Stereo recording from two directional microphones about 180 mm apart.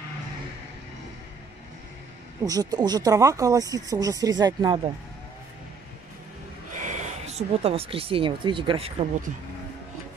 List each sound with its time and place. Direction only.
2.4 s speech: 20° right (ahead or behind)
6.7 s speech: 45° right (ahead or behind)